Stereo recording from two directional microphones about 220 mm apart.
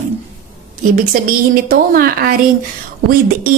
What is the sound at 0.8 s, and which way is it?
A woman's voice, 40° right (ahead or behind).